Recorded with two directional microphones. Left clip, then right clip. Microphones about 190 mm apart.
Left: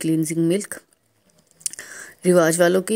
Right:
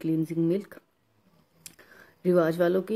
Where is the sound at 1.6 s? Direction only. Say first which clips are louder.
Left 16 dB; 25° left (ahead or behind).